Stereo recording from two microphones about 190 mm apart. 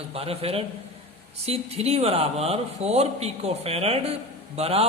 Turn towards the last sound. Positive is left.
turn(degrees=-30)  # may be behind; listen again after turning